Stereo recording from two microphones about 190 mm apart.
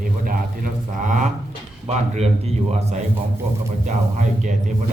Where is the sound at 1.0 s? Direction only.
40° right (ahead or behind).